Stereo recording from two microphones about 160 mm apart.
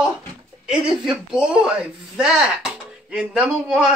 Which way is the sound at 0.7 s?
5° right (ahead or behind).